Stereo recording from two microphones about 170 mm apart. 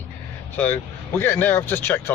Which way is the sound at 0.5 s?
10° left (ahead or behind).